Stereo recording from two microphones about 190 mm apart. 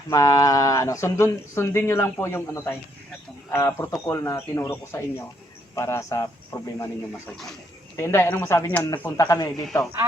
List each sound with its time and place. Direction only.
0.1 s speech: 20° left (ahead or behind)
7.9 s speech: 15° left (ahead or behind)
10.0 s speech: 10° right (ahead or behind)